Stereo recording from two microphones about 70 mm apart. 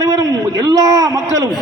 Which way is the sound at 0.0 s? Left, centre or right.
Right.